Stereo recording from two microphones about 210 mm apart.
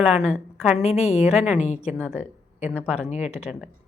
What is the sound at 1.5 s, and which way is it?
Speech, 35° left (ahead or behind).